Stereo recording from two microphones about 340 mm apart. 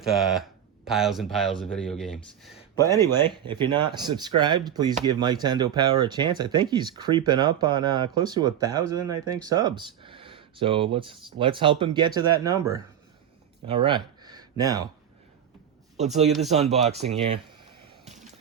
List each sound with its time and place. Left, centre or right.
0.0 s speech: centre
2.8 s speech: centre
16.0 s speech: centre